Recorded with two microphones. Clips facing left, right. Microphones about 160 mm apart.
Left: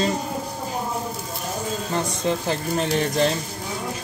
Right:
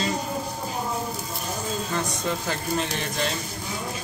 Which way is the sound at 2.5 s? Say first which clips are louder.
Left 4 dB; 35° left (ahead or behind).